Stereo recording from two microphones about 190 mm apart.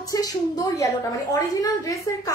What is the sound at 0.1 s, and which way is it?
A woman's voice, 20° left (ahead or behind).